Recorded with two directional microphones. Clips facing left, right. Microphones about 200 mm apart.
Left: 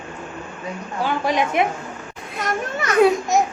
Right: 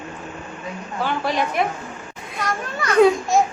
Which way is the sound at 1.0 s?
15° left (ahead or behind).